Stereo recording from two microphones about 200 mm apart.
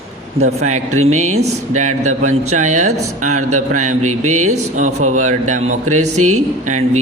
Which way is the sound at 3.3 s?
90° right.